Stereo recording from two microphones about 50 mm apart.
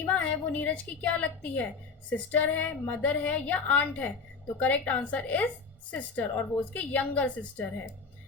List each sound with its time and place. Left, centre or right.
0.1 s a woman's voice: left